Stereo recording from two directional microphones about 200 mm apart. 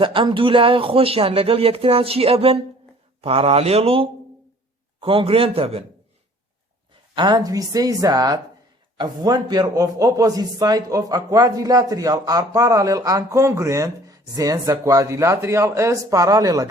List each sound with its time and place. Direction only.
0.0 s speech: 25° right (ahead or behind)
7.2 s a man's voice: 20° right (ahead or behind)